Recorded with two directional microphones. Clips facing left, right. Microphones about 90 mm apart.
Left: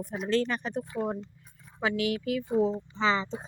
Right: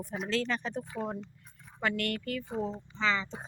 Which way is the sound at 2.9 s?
25° left (ahead or behind).